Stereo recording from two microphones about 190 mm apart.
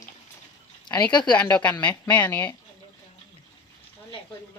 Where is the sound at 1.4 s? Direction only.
5° left (ahead or behind).